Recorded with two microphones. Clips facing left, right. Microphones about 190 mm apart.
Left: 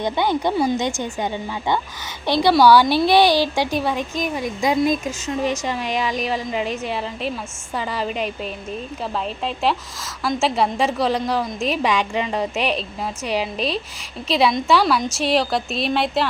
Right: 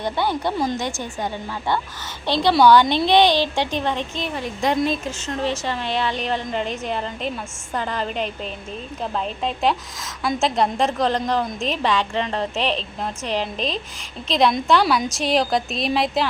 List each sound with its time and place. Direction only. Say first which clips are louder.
0.0 s a woman's voice: left 2 dB; 15° left (ahead or behind); by 16.2 s centre (ahead or behind)